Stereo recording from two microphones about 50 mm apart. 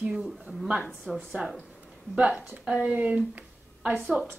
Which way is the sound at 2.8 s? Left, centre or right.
Right.